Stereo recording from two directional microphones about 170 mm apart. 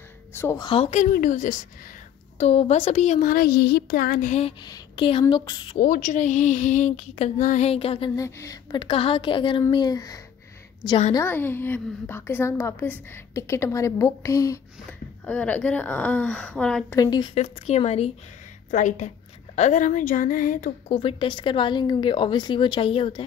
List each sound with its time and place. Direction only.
0.3 s speech: 15° left (ahead or behind)
0.6 s speech: 30° left (ahead or behind)
1.1 s speech: 50° left (ahead or behind)
2.3 s speech: 35° left (ahead or behind)
4.6 s a woman's voice: 30° left (ahead or behind)
5.8 s speech: 50° left (ahead or behind); by 8.1 s 35° left (ahead or behind)
8.2 s a woman's voice: 20° left (ahead or behind)
8.8 s a woman's voice: 30° left (ahead or behind)
14.9 s a woman's voice: 10° left (ahead or behind)
16.9 s a woman's voice: 25° left (ahead or behind)
17.3 s speech: 40° left (ahead or behind)
20.9 s a woman's voice: 30° left (ahead or behind)